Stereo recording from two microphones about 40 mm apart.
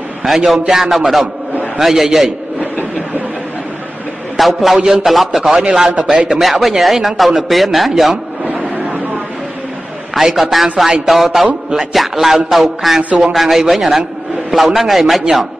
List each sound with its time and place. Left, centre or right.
0.2 s a man's voice: centre
4.4 s a man's voice: centre
6.4 s speech: centre
10.1 s speech: centre